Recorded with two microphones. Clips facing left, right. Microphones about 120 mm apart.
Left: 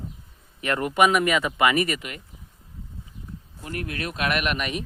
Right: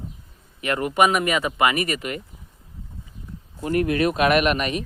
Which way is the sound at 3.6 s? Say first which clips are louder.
Right 11 dB; 50° right (ahead or behind).